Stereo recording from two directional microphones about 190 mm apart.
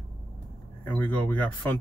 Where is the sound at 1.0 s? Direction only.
10° left (ahead or behind).